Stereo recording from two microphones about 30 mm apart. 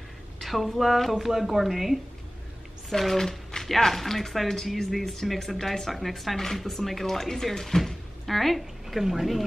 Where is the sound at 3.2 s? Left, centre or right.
Centre.